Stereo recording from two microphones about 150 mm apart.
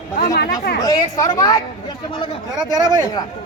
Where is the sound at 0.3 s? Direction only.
90° left.